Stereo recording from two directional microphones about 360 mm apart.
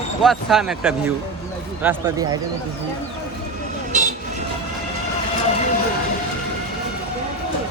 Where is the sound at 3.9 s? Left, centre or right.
Right.